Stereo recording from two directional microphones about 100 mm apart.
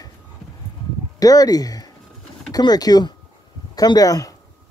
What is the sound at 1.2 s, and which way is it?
A man's voice, 40° left (ahead or behind).